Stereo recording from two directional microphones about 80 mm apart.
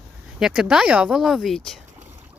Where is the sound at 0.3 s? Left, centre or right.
Centre.